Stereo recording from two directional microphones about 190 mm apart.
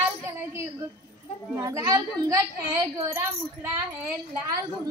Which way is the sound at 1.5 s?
15° right (ahead or behind).